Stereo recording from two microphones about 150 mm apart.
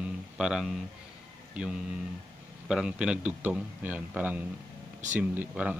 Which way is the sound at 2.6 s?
5° right (ahead or behind).